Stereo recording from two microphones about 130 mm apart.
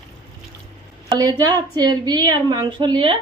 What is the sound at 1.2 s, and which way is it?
A woman's voice, 30° right (ahead or behind).